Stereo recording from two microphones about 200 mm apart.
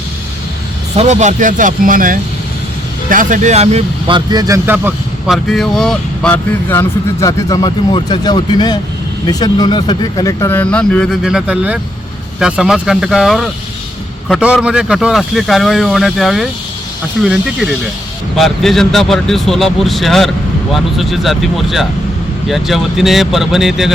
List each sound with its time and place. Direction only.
0.9 s speech: 35° right (ahead or behind); by 23.9 s centre (ahead or behind)